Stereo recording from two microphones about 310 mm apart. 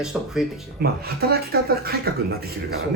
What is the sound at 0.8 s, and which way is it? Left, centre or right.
A man's voice, right.